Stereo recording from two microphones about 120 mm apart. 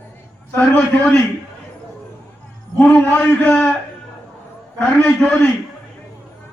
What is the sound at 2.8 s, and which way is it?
Speech, 15° left (ahead or behind).